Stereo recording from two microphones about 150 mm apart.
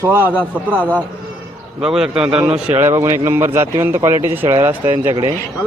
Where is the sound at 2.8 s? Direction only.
15° right (ahead or behind).